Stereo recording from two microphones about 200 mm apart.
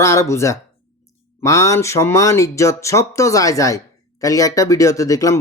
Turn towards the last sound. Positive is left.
turn(degrees=15)  # may be behind; listen again after turning